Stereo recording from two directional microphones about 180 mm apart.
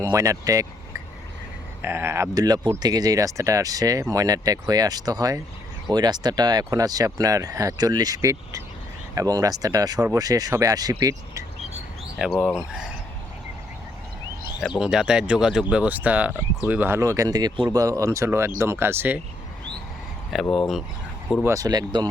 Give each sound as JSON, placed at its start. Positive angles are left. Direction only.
{"t": 0.1, "sound": "speech", "side_deg": -15}
{"t": 1.8, "sound": "speech", "side_deg": -15}
{"t": 12.2, "sound": "speech", "side_deg": 0}
{"t": 14.8, "sound": "speech", "side_deg": -5}
{"t": 20.3, "sound": "speech", "side_deg": 0}
{"t": 21.4, "sound": "speech", "side_deg": -20}